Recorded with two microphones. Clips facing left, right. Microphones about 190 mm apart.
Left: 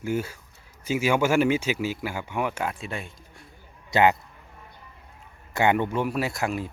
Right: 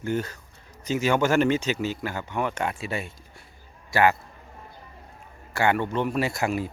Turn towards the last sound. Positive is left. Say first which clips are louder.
# right 2 dB
turn(degrees=0)  # may be behind; listen again after turning